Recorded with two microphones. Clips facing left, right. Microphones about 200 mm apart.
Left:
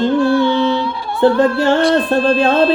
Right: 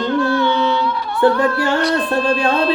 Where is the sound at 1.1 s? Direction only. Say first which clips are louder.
Left 3 dB; 25° left (ahead or behind).